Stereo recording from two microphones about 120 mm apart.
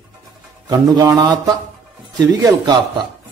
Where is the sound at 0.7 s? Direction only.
30° right (ahead or behind).